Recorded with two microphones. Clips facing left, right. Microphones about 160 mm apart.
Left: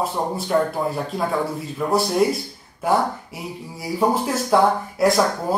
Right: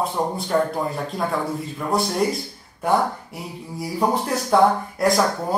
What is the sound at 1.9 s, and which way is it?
Speech, 5° left (ahead or behind).